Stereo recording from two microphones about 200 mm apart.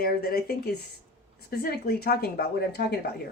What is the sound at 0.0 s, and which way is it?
Speech, 50° left (ahead or behind).